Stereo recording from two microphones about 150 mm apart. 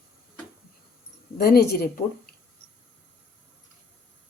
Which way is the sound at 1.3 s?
90° left.